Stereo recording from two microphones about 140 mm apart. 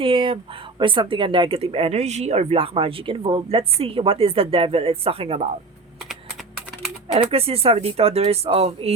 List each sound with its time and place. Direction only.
0.0 s speech: 40° right (ahead or behind)
7.2 s speech: 45° right (ahead or behind)